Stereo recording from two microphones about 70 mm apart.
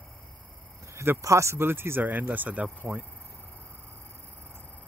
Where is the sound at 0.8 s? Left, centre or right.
Right.